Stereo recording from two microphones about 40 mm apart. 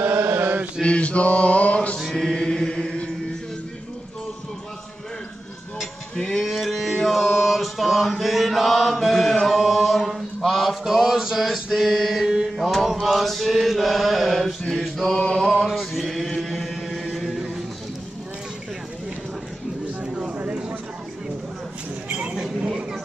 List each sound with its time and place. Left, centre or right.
0.0 s chant: right
0.8 s mantra: left
2.0 s mantra: centre
6.4 s a sound: centre
7.1 s mantra: centre
10.8 s a sound: centre
11.7 s mantra: centre
15.6 s chant: centre